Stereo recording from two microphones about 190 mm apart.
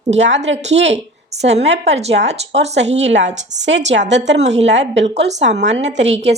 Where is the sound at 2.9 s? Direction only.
75° right (ahead or behind).